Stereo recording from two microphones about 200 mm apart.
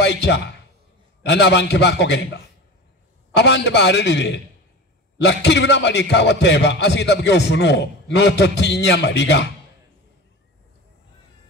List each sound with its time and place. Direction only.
0.0 s a man's voice: 60° left (ahead or behind)